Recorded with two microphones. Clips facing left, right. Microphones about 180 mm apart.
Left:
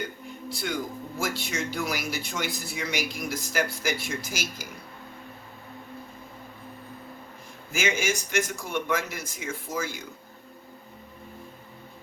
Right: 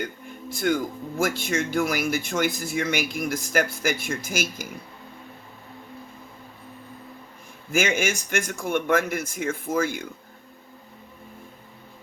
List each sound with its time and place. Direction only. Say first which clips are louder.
0.0 s a sound: right 2 dB; 50° right (ahead or behind)
1.2 s speech: right 6 dB; 50° right (ahead or behind)
7.7 s speech: right 4 dB; 55° right (ahead or behind)